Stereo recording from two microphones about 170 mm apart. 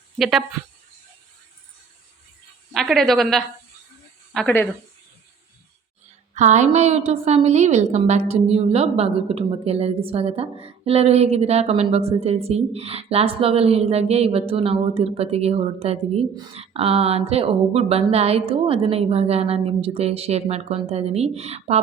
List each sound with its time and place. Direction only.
0.2 s speech: centre (ahead or behind)
2.7 s a woman's voice: centre (ahead or behind)
6.3 s a woman's voice: 45° right (ahead or behind)